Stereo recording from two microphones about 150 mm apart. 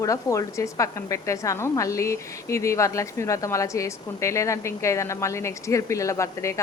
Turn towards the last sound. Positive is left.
turn(degrees=20)  # may be behind; listen again after turning